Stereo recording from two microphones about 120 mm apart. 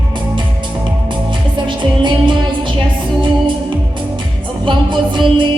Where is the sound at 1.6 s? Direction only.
40° right (ahead or behind).